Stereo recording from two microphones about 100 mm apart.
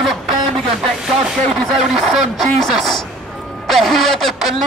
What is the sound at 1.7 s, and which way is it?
Speech, centre (ahead or behind).